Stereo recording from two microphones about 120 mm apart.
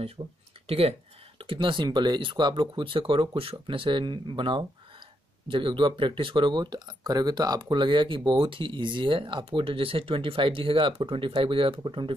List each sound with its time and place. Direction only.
0.2 s speech: 40° right (ahead or behind)
0.7 s speech: 55° right (ahead or behind)
1.4 s speech: 45° right (ahead or behind)